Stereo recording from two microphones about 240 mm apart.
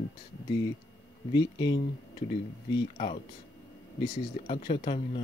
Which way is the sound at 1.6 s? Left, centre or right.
Centre.